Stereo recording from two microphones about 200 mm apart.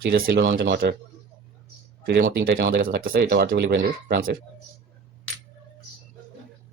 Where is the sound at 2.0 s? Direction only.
45° right (ahead or behind).